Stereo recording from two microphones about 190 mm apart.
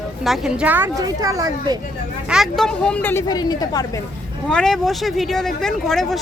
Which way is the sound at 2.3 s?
Centre (ahead or behind).